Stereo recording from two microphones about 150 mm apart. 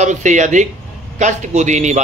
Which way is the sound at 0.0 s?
55° right (ahead or behind).